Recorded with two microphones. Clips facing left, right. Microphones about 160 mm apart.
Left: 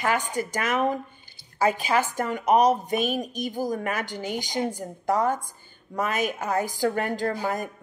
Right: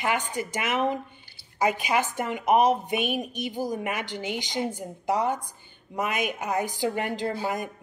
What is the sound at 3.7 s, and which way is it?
Speech, 15° right (ahead or behind).